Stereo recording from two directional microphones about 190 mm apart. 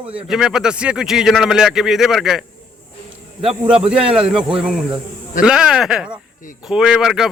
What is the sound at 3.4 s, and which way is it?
Speech, 30° right (ahead or behind).